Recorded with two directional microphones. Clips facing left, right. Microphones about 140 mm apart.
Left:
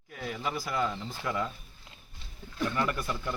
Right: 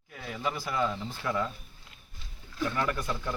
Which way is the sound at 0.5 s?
10° left (ahead or behind).